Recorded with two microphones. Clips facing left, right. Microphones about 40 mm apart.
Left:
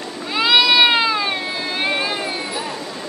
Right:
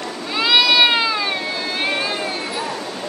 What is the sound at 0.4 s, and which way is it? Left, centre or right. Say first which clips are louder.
Cat: left 1 dB; centre.